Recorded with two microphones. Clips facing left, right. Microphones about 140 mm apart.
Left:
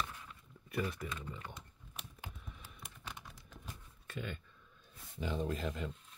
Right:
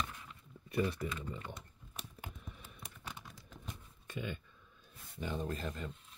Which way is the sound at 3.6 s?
15° right (ahead or behind).